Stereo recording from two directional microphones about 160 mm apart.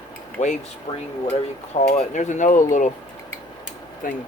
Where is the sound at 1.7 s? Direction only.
50° left (ahead or behind).